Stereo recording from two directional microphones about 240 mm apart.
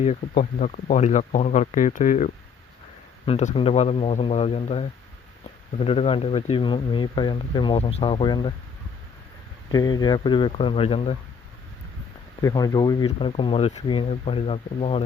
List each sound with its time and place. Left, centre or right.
0.0 s speech: left
9.7 s speech: centre
12.4 s speech: centre